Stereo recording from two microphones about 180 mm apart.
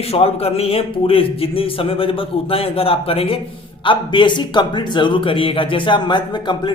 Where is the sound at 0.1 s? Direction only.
35° left (ahead or behind).